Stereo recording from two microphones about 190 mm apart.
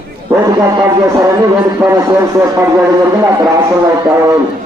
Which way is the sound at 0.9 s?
15° right (ahead or behind).